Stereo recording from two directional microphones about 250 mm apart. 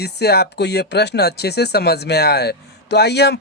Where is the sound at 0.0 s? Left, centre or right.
Left.